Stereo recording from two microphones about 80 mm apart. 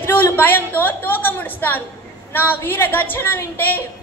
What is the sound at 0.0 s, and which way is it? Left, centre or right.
A woman's voice, left.